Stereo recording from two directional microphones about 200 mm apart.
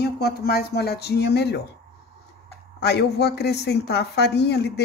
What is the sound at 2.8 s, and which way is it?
A woman's voice, 55° left (ahead or behind).